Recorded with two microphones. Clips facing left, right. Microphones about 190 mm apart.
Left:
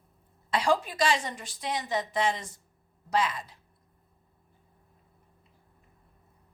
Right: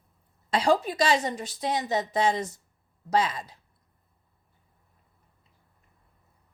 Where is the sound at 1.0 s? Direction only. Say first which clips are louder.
Right 3 dB; 40° right (ahead or behind).